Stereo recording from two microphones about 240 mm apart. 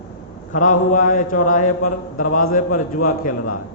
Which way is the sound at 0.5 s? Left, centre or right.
Left.